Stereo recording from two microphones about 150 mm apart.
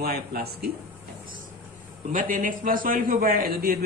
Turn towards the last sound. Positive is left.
turn(degrees=-85)